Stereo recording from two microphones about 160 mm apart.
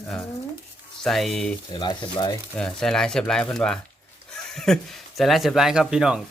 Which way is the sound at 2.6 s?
5° left (ahead or behind).